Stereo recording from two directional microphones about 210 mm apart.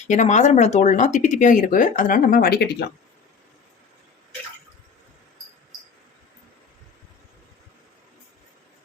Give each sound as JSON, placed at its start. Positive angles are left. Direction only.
{"t": 0.1, "sound": "speech", "side_deg": 35}